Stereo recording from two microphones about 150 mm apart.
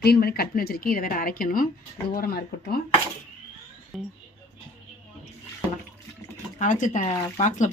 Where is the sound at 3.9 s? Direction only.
Centre (ahead or behind).